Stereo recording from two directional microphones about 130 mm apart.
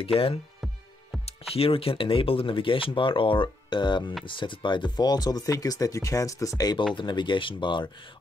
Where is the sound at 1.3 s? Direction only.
45° left (ahead or behind).